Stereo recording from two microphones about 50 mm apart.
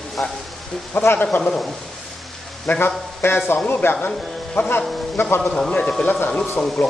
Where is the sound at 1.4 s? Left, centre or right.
Centre.